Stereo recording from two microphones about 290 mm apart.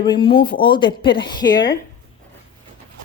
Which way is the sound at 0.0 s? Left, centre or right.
Centre.